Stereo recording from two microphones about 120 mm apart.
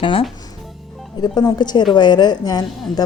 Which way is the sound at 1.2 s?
35° left (ahead or behind).